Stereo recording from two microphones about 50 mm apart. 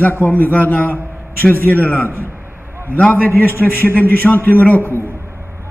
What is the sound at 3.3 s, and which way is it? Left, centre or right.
A man's voice, left.